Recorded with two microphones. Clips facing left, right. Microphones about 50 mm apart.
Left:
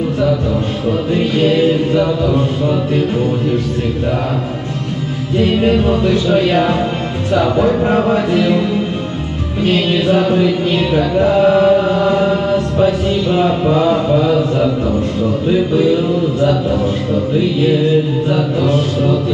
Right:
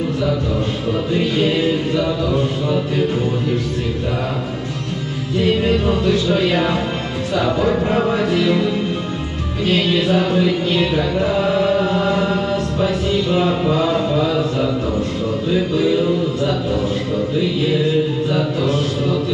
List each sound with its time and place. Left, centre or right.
1.4 s mantra: centre
5.4 s music: centre
6.5 s mantra: centre
7.5 s music: centre
9.9 s mantra: centre
11.6 s chant: centre
12.8 s mantra: centre
18.3 s music: centre